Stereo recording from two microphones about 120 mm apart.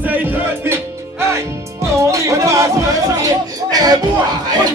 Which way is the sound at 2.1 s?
25° right (ahead or behind).